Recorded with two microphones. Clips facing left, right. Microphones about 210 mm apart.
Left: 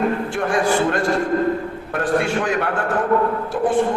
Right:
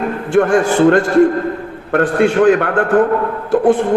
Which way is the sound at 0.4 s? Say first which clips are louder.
Right 11 dB; 60° right (ahead or behind).